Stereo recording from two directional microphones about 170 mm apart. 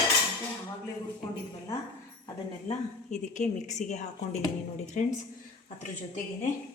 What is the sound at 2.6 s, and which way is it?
Speech, 45° left (ahead or behind).